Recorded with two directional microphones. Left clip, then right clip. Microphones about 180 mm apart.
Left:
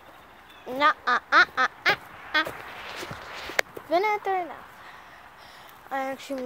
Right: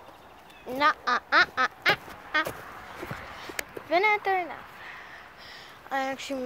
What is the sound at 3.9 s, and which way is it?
Speech, 20° left (ahead or behind).